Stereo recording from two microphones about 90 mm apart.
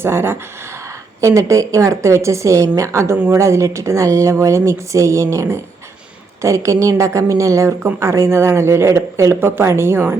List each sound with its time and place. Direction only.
0.0 s a woman's voice: 25° right (ahead or behind)